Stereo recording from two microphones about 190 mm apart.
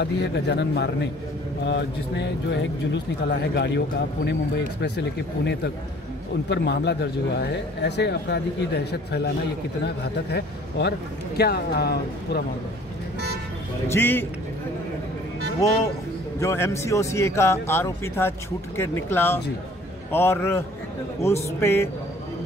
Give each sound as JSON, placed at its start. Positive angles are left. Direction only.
{"t": 0.0, "sound": "speech", "side_deg": 65}
{"t": 13.8, "sound": "speech", "side_deg": 10}
{"t": 16.3, "sound": "speech", "side_deg": 15}